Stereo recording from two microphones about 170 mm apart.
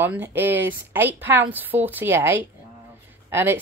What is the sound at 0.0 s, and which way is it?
Speech, 10° right (ahead or behind).